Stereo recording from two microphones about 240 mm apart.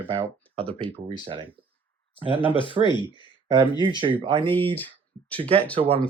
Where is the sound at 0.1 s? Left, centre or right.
Right.